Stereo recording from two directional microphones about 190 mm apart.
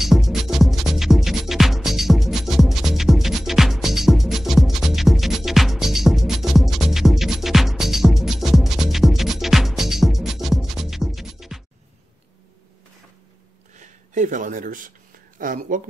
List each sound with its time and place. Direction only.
0.0 s music: centre (ahead or behind)
13.7 s a sound: 40° right (ahead or behind)
15.3 s speech: 45° right (ahead or behind)